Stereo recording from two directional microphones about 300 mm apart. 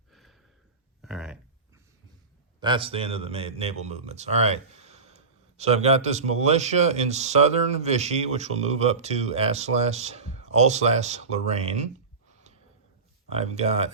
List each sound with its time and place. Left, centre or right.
0.1 s a sound: centre
2.6 s speech: centre
13.3 s speech: right